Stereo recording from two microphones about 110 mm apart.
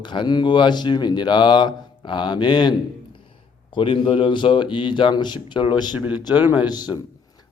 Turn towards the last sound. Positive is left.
turn(degrees=40)  # may be behind; listen again after turning